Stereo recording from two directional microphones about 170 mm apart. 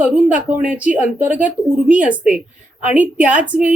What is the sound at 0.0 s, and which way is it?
Speech, 5° right (ahead or behind).